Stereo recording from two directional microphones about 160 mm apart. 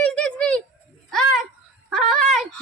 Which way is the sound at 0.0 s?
5° left (ahead or behind).